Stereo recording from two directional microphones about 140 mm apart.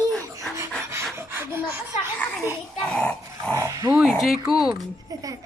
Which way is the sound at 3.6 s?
20° right (ahead or behind).